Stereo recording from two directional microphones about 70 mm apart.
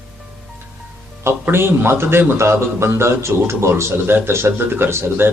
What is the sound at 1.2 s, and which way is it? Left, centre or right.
A man's voice, right.